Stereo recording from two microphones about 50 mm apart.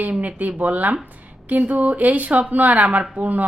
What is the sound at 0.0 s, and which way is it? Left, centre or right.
A woman's voice, right.